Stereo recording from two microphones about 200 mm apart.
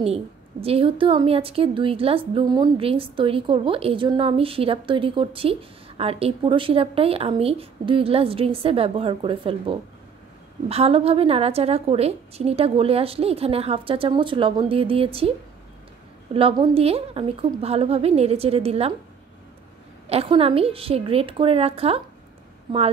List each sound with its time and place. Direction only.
0.0 s a woman's voice: 30° right (ahead or behind)
16.3 s a woman's voice: 25° right (ahead or behind)
20.1 s a woman's voice: 30° right (ahead or behind)